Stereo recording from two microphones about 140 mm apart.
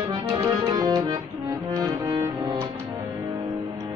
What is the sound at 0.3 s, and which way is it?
Music, 30° right (ahead or behind).